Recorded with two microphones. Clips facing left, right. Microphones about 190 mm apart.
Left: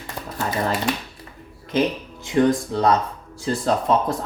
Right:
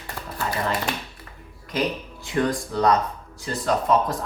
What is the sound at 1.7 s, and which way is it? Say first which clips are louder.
Speech: left 4 dB; 25° left (ahead or behind).